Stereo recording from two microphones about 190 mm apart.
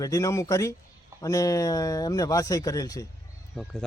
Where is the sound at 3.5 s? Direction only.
5° left (ahead or behind).